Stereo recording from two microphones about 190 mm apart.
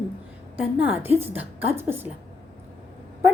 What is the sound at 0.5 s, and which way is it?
A woman's voice, 5° right (ahead or behind).